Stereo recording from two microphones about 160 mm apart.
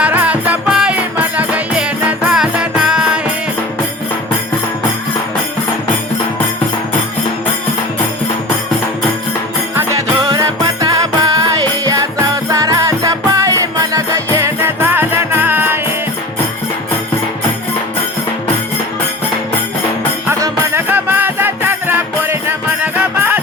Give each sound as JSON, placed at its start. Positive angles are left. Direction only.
{"t": 0.0, "sound": "music", "side_deg": -10}
{"t": 10.2, "sound": "music", "side_deg": -25}
{"t": 20.2, "sound": "music", "side_deg": -15}